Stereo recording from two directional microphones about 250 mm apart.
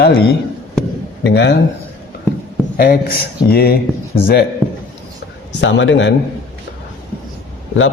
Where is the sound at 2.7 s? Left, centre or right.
Left.